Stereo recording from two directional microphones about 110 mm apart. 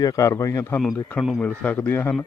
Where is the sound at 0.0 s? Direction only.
30° left (ahead or behind).